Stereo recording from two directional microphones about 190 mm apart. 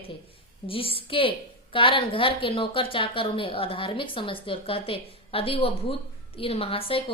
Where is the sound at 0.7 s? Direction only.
30° left (ahead or behind).